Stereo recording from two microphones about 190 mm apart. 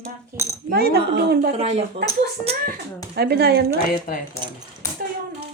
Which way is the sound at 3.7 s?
50° left (ahead or behind).